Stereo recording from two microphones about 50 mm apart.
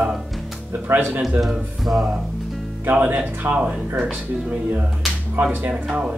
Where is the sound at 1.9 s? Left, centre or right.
Right.